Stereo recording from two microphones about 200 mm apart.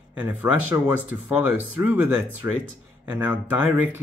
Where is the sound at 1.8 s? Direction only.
10° right (ahead or behind).